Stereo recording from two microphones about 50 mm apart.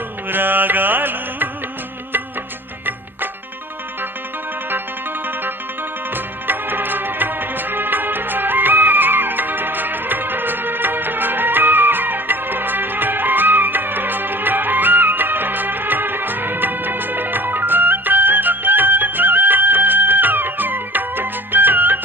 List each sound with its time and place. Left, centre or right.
0.3 s music: right
6.1 s music: right